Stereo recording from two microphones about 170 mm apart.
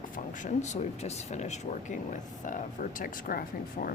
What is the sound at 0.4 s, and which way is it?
Speech, 45° left (ahead or behind).